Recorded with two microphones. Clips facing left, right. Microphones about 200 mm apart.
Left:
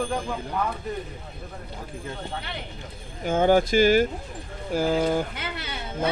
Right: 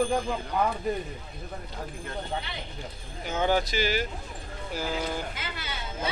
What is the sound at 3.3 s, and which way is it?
Speech, 50° left (ahead or behind).